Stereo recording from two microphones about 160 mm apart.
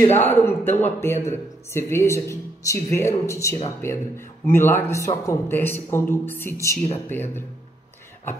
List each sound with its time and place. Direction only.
0.0 s speech: 15° left (ahead or behind)